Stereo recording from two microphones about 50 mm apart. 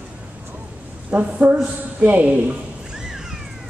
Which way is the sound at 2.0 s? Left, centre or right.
Right.